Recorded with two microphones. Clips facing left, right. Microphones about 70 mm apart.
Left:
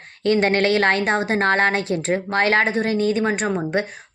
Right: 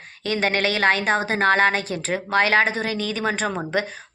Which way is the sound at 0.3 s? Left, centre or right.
Left.